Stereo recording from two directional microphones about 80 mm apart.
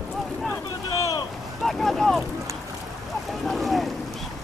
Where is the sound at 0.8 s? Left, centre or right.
Left.